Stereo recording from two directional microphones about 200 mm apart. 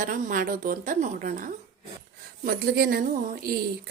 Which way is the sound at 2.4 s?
50° right (ahead or behind).